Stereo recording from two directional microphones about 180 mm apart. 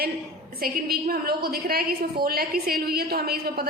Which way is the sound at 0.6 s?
55° right (ahead or behind).